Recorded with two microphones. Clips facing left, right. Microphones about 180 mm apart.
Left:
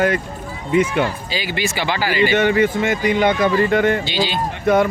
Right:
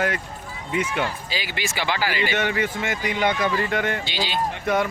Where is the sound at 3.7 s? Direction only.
35° left (ahead or behind).